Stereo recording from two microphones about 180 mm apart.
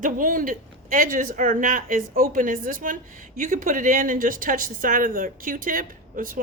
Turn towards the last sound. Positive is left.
turn(degrees=-50)  # may be behind; listen again after turning